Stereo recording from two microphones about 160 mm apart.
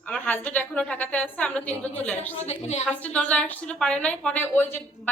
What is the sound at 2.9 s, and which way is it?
A woman's voice, 10° left (ahead or behind).